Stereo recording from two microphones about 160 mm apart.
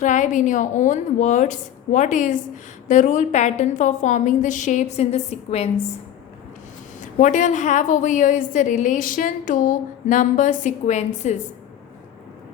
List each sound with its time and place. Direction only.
0.0 s a woman's voice: 50° left (ahead or behind)
7.0 s a woman's voice: 50° left (ahead or behind)